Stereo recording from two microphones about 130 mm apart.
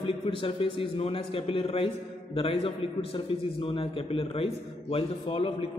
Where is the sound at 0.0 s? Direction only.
45° left (ahead or behind).